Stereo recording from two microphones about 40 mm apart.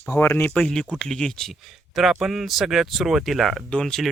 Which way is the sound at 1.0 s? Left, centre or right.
Left.